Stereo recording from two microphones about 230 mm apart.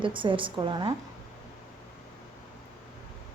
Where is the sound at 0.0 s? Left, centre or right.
Right.